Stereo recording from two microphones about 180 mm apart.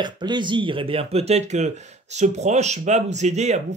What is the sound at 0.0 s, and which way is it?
Speech, 25° right (ahead or behind).